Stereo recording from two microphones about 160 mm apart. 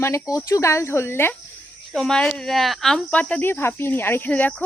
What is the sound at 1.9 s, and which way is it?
Speech, 5° left (ahead or behind).